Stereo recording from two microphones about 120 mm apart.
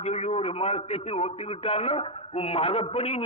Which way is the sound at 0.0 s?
65° left (ahead or behind).